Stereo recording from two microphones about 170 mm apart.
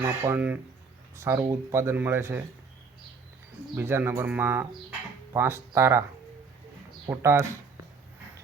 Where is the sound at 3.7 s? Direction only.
15° right (ahead or behind).